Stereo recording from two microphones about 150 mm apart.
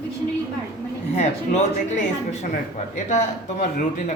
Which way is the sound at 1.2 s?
50° left (ahead or behind).